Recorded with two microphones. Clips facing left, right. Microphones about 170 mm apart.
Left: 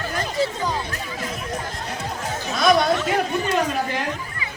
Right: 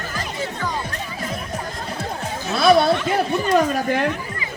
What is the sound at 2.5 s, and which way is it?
Speech, 35° right (ahead or behind).